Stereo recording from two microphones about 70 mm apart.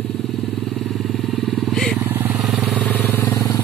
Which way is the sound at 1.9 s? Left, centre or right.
Right.